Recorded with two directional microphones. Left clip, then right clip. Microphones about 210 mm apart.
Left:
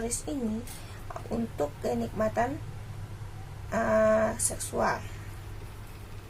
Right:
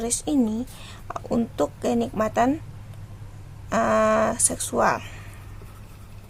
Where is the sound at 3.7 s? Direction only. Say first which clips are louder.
Right 4 dB; 40° right (ahead or behind).